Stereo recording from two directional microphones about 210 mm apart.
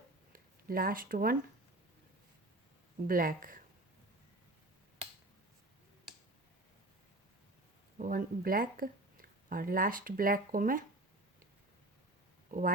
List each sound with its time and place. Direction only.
0.3 s speech: 45° right (ahead or behind)
3.1 s speech: 45° right (ahead or behind)
7.9 s speech: 40° right (ahead or behind)
12.5 s speech: 40° right (ahead or behind)